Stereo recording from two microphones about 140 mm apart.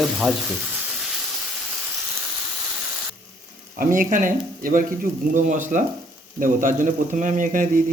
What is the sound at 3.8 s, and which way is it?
Speech, 75° right (ahead or behind).